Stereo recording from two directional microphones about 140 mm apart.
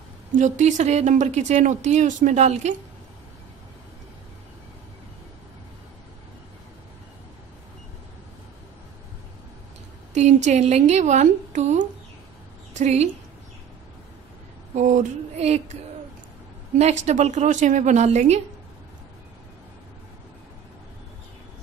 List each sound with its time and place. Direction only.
0.3 s speech: 60° right (ahead or behind)
10.1 s a woman's voice: 55° right (ahead or behind)
14.8 s speech: 60° right (ahead or behind)
16.7 s speech: 55° right (ahead or behind)